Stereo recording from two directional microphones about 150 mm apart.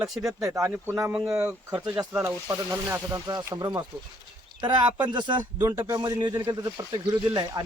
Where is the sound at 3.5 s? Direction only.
30° right (ahead or behind).